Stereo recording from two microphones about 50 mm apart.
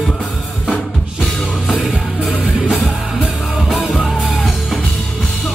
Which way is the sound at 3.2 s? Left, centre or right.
Centre.